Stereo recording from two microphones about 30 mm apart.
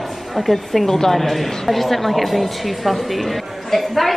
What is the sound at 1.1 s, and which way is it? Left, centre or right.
A woman's voice, centre.